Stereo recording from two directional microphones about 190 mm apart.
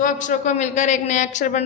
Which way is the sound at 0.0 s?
45° left (ahead or behind).